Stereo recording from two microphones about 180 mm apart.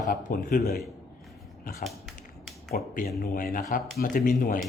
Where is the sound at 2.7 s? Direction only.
55° left (ahead or behind).